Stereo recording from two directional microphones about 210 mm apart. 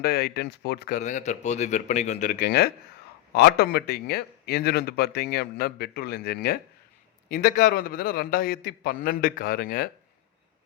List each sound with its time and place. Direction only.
0.0 s speech: 50° left (ahead or behind)
0.9 s speech: 35° left (ahead or behind)
7.3 s speech: 40° left (ahead or behind)